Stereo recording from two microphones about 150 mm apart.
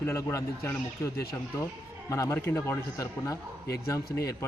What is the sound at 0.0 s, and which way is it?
Speech, 20° left (ahead or behind).